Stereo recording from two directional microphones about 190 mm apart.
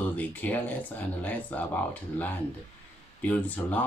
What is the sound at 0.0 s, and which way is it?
Speech, 10° left (ahead or behind).